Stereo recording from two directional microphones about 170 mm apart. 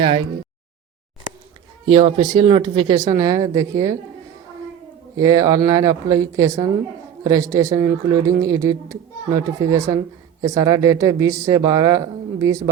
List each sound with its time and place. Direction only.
1.9 s speech: 30° right (ahead or behind)
5.1 s speech: 20° right (ahead or behind)